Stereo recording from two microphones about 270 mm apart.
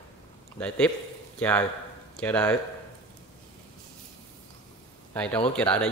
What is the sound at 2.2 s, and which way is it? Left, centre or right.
Speech, centre.